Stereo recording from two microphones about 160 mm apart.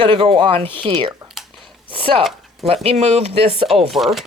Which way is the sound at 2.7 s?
40° right (ahead or behind).